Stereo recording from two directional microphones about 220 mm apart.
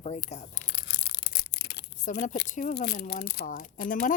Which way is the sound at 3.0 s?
45° left (ahead or behind).